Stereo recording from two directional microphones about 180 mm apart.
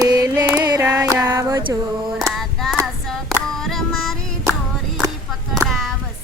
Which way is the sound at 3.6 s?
Centre (ahead or behind).